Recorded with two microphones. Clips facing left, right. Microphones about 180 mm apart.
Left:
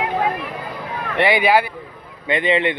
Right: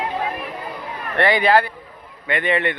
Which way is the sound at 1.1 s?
10° left (ahead or behind).